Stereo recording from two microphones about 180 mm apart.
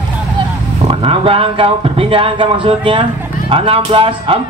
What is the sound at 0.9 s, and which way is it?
A man's voice, 30° right (ahead or behind).